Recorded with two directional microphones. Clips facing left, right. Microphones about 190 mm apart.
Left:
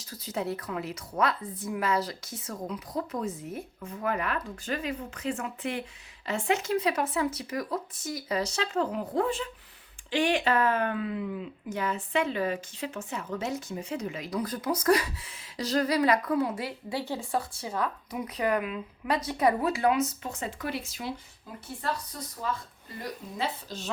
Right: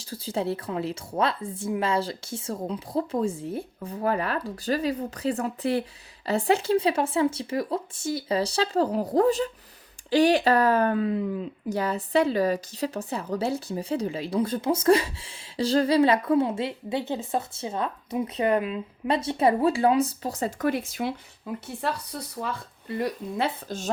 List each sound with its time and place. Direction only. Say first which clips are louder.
0.0 s speech: right 4 dB; 30° right (ahead or behind); by 23.9 s 50° right (ahead or behind)